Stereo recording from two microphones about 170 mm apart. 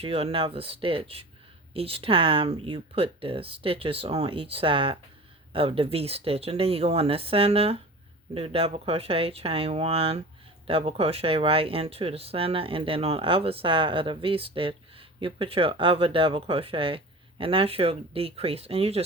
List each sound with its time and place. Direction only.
0.0 s speech: 35° right (ahead or behind)